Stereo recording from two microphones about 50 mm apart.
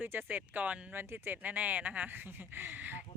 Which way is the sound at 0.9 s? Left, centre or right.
Right.